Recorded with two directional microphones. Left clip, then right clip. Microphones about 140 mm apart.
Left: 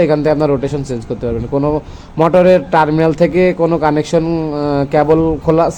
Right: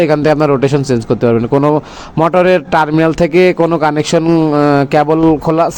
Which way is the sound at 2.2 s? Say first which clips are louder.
Even; 50° right (ahead or behind).